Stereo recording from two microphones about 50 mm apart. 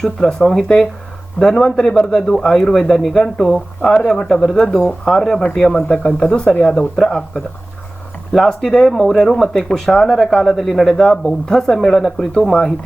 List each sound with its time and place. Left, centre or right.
0.0 s speech: centre
1.4 s speech: centre